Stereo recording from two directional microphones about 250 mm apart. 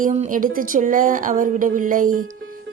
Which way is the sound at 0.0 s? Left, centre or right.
Right.